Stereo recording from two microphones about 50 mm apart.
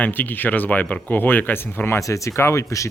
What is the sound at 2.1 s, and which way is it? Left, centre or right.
Speech, left.